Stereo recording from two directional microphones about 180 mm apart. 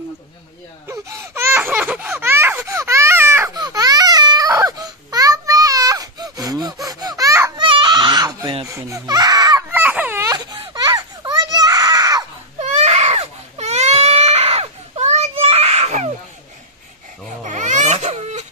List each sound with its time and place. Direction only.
0.8 s a sound: 15° right (ahead or behind)
8.6 s baby cry: 15° right (ahead or behind)
12.5 s baby cry: 40° right (ahead or behind)
17.4 s baby cry: 40° right (ahead or behind)